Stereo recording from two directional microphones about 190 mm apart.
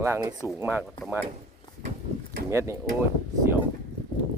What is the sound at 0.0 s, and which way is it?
Speech, 15° right (ahead or behind).